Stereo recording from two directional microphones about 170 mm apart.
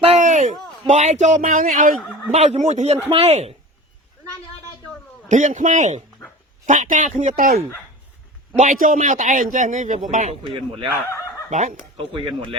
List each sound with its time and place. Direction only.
0.1 s a sound: 45° right (ahead or behind)
0.9 s a man's voice: 45° right (ahead or behind)
2.0 s speech: 5° left (ahead or behind)
2.3 s speech: 40° right (ahead or behind)
5.3 s a man's voice: 50° right (ahead or behind)
8.5 s a man's voice: 45° right (ahead or behind)
10.4 s speech: 30° right (ahead or behind)
11.9 s speech: 30° right (ahead or behind)